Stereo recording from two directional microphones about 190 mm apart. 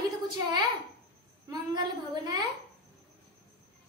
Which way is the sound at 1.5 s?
20° right (ahead or behind).